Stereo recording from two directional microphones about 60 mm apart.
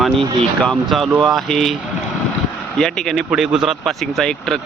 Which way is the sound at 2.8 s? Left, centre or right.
Centre.